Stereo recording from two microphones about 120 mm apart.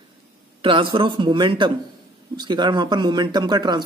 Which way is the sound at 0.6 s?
45° right (ahead or behind).